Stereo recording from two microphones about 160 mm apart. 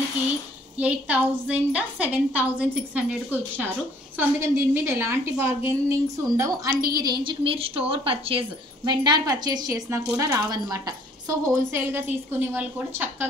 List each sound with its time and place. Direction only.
0.7 s a woman's voice: 10° right (ahead or behind)